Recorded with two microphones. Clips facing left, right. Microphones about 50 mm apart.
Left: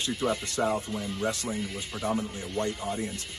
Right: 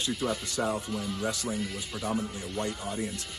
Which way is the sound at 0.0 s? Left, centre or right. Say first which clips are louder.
Left 2 dB; left.